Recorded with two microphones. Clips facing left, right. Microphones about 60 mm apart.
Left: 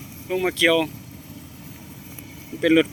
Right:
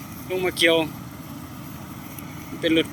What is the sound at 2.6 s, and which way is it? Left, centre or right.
Speech, centre.